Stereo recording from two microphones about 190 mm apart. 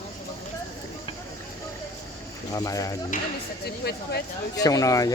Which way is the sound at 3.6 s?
60° left (ahead or behind).